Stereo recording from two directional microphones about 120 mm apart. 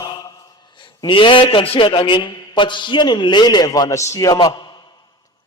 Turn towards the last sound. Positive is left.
turn(degrees=30)  # may be behind; listen again after turning